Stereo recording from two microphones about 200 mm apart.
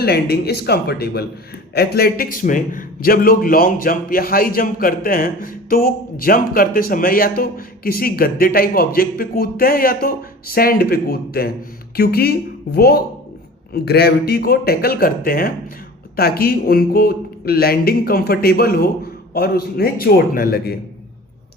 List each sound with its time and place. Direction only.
0.0 s a man's voice: 55° left (ahead or behind)